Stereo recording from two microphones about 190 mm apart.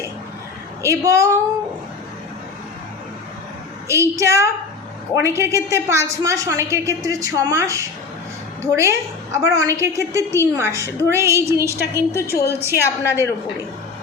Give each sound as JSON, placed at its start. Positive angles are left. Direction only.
{"t": 0.8, "sound": "a woman's voice", "side_deg": -15}
{"t": 3.8, "sound": "a woman's voice", "side_deg": -15}
{"t": 12.3, "sound": "a woman's voice", "side_deg": 55}
{"t": 12.7, "sound": "a woman's voice", "side_deg": 15}